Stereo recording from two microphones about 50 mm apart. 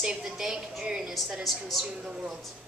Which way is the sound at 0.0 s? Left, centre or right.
Centre.